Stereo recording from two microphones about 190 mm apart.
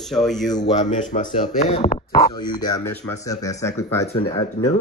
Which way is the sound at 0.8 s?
35° left (ahead or behind).